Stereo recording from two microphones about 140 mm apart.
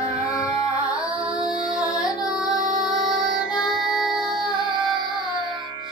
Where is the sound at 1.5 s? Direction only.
5° right (ahead or behind).